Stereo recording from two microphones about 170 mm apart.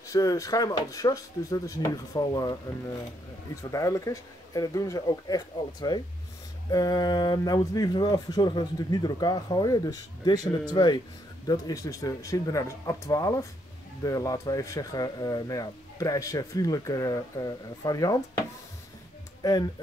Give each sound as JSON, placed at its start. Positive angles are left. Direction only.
{"t": 0.0, "sound": "speech", "side_deg": 20}
{"t": 3.7, "sound": "speech", "side_deg": 20}